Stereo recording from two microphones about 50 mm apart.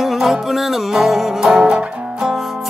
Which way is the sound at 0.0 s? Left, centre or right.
Centre.